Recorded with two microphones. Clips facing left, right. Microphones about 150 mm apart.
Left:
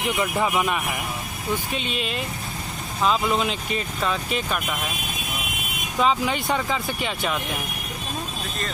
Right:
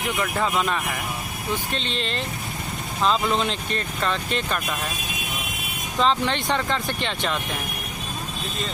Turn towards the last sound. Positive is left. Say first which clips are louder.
# even
turn(degrees=5)  # may be behind; listen again after turning